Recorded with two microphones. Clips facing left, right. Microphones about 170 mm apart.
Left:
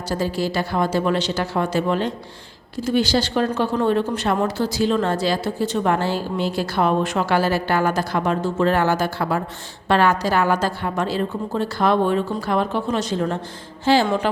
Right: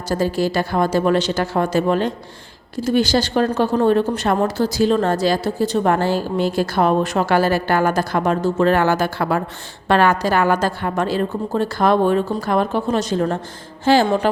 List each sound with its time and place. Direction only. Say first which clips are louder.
0.1 s a woman's voice: right 4 dB; 45° right (ahead or behind)
8.6 s a woman's voice: right 2 dB; 65° right (ahead or behind); by 14.3 s 45° right (ahead or behind)